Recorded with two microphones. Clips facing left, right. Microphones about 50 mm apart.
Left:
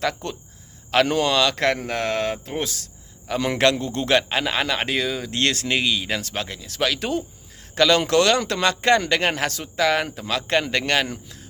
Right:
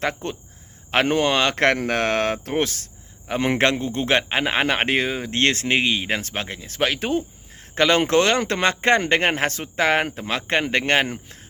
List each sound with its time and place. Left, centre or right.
0.0 s speech: right